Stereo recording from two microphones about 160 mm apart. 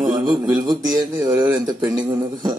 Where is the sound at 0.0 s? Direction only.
25° right (ahead or behind).